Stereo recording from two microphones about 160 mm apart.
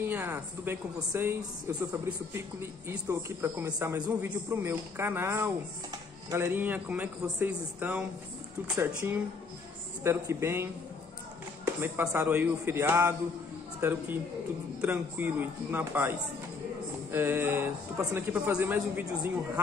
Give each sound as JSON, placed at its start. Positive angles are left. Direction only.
{"t": 0.0, "sound": "speech", "side_deg": -15}